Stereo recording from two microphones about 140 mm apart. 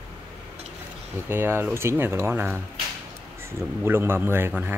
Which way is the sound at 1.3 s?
15° right (ahead or behind).